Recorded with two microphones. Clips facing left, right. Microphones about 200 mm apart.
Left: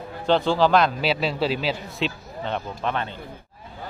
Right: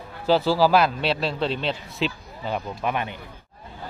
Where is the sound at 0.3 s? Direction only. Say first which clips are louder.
Even; 5° right (ahead or behind).